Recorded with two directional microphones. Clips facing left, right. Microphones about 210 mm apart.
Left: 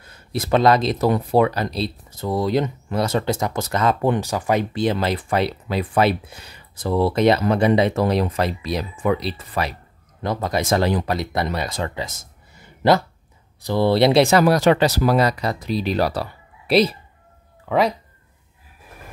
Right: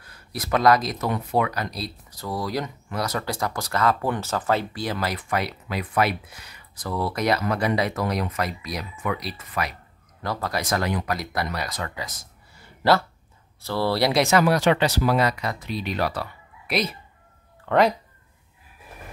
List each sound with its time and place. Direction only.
0.0 s speech: 25° left (ahead or behind)
17.6 s speech: centre (ahead or behind)